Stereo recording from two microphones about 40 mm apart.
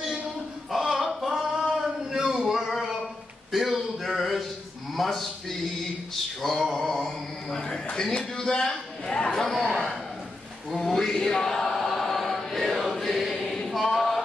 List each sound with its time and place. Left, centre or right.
0.7 s a sound: centre
6.4 s a man's voice: centre
11.3 s choir: centre
13.9 s music: centre